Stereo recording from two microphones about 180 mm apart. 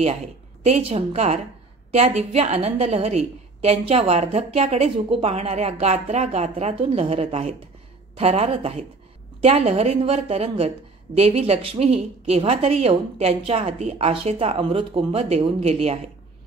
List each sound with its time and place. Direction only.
0.7 s a woman's voice: 35° right (ahead or behind)